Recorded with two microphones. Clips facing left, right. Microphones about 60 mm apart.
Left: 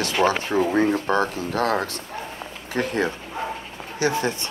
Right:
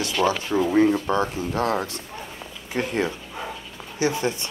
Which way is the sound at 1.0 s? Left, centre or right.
Left.